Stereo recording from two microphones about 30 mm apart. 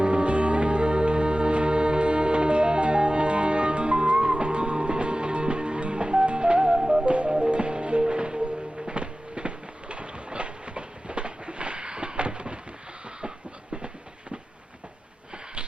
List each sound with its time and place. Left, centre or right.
0.0 s music: right